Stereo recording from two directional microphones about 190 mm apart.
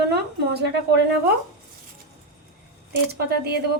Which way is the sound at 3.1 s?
55° right (ahead or behind).